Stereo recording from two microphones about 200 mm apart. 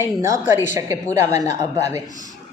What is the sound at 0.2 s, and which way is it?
A woman's voice, 15° right (ahead or behind).